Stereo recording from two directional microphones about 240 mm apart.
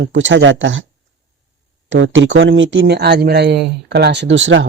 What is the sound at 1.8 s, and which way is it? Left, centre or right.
Speech, right.